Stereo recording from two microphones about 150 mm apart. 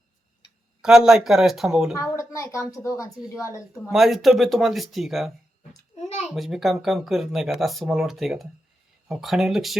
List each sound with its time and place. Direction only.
0.8 s speech: 5° right (ahead or behind)
2.0 s a woman's voice: 20° left (ahead or behind)
3.8 s speech: centre (ahead or behind)
6.0 s a sound: 50° left (ahead or behind)
6.3 s speech: centre (ahead or behind)